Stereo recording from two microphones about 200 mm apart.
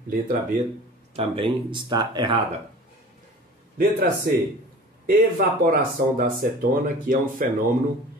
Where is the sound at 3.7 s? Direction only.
50° right (ahead or behind).